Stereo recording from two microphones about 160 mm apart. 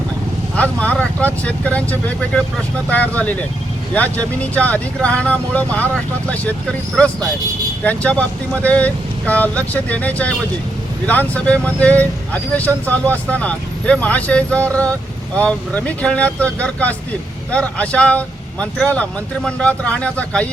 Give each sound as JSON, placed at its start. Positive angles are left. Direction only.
{"t": 0.5, "sound": "speech", "side_deg": 10}